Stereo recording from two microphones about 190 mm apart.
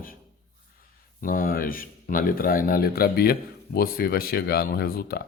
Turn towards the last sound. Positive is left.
turn(degrees=55)  # may be behind; listen again after turning